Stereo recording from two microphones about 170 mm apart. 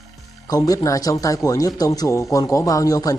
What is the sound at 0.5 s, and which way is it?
Speech, 20° left (ahead or behind).